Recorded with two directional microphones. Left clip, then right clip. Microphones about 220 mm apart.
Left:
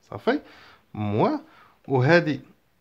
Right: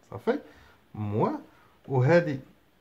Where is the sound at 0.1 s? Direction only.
30° left (ahead or behind).